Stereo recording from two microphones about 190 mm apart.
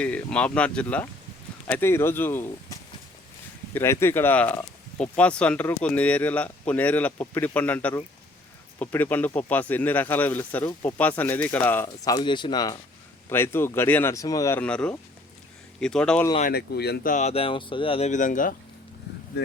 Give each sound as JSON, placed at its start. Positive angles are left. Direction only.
{"t": 0.0, "sound": "speech", "side_deg": 5}
{"t": 3.8, "sound": "speech", "side_deg": 10}
{"t": 16.4, "sound": "speech", "side_deg": 55}